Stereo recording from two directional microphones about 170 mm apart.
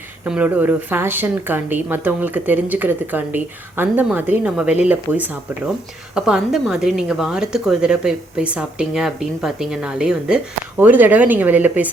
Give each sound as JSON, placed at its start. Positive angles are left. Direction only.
{"t": 0.3, "sound": "a woman's voice", "side_deg": -10}